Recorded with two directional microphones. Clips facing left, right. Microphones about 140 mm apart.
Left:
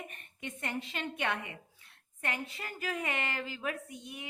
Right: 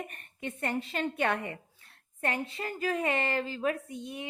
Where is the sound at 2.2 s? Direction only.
30° right (ahead or behind).